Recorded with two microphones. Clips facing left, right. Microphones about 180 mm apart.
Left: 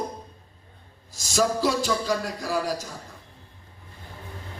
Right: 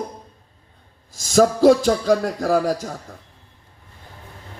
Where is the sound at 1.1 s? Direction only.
55° right (ahead or behind).